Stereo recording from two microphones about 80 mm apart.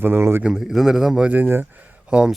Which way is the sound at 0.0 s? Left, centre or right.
Right.